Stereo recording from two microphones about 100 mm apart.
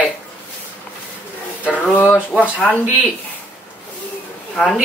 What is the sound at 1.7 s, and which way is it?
A man's voice, 15° left (ahead or behind).